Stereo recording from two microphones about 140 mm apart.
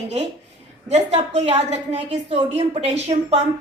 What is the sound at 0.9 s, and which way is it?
Speech, 50° right (ahead or behind).